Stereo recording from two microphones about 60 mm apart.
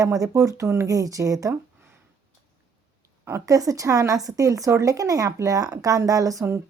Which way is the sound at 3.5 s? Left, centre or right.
Right.